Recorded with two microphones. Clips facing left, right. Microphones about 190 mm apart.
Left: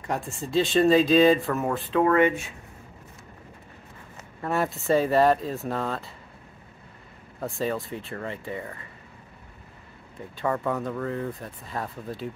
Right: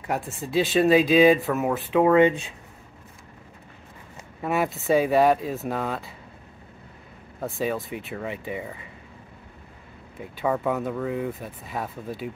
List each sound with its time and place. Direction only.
0.0 s speech: 5° right (ahead or behind)
4.4 s speech: 5° right (ahead or behind)
7.3 s speech: centre (ahead or behind)
10.1 s speech: 5° right (ahead or behind)